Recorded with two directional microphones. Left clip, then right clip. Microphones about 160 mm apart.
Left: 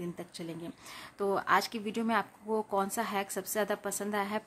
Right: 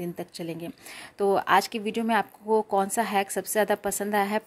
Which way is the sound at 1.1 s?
25° right (ahead or behind).